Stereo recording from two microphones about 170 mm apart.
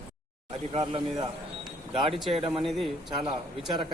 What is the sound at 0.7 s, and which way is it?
Speech, 25° right (ahead or behind).